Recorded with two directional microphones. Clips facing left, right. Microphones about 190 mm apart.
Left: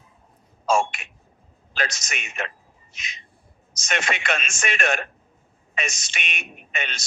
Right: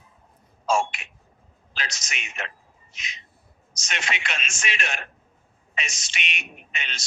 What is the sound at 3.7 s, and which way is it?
A man's voice, 50° left (ahead or behind).